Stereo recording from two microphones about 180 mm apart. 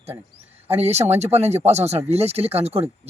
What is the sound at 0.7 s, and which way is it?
Speech, 35° right (ahead or behind).